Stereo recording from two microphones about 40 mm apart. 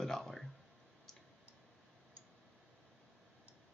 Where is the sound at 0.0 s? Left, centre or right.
Centre.